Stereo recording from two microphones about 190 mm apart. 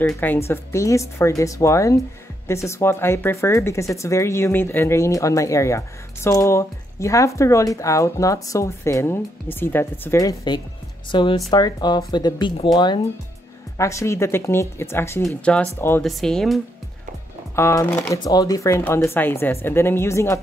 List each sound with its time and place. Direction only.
0.1 s speech: 10° left (ahead or behind)
17.6 s speech: 15° left (ahead or behind)